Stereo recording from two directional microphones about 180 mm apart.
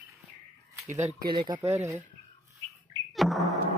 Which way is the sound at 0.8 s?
40° right (ahead or behind).